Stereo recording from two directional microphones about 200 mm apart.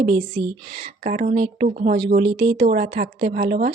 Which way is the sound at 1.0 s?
40° right (ahead or behind).